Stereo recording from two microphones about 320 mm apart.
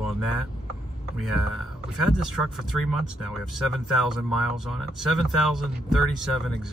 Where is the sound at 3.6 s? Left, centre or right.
Centre.